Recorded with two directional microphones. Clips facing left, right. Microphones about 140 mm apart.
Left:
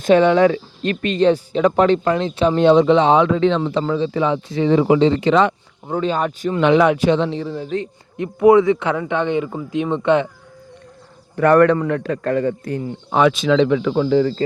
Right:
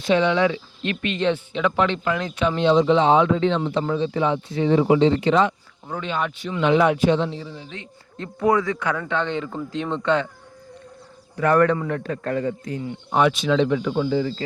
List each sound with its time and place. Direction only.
0.0 s speech: 50° left (ahead or behind); by 2.6 s 30° left (ahead or behind)
2.6 s speech: 60° left (ahead or behind); by 5.5 s 85° left
5.9 s speech: 35° left (ahead or behind)
6.6 s speech: 85° left; by 7.7 s 60° left (ahead or behind)
8.1 s speech: 15° left (ahead or behind)
11.3 s a man's voice: 60° left (ahead or behind)
13.1 s speech: 90° left; by 14.3 s 65° left (ahead or behind)